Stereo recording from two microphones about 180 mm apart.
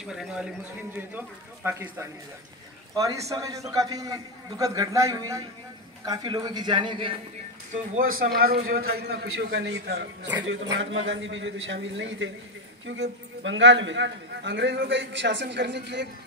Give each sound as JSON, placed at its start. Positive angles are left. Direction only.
{"t": 0.0, "sound": "a man's voice", "side_deg": -5}
{"t": 7.7, "sound": "a man's voice", "side_deg": -45}
{"t": 10.8, "sound": "a man's voice", "side_deg": -90}